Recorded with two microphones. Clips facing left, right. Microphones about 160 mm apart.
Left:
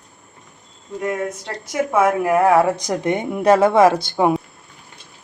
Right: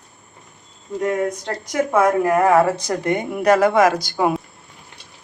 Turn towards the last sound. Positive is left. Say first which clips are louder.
# left 3 dB
turn(degrees=25)  # may be behind; listen again after turning